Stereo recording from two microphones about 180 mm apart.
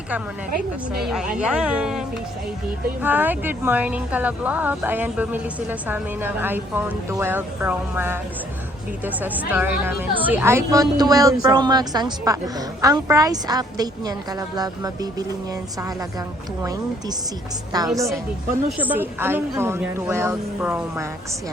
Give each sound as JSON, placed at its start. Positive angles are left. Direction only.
{"t": 1.0, "sound": "a woman's voice", "side_deg": -5}
{"t": 17.7, "sound": "a woman's voice", "side_deg": -20}